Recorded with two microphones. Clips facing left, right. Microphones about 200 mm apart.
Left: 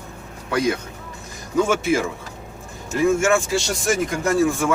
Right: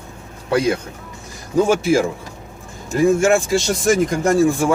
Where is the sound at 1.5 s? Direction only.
35° right (ahead or behind).